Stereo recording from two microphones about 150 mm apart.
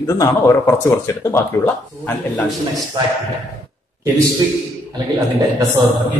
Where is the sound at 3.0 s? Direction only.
30° right (ahead or behind).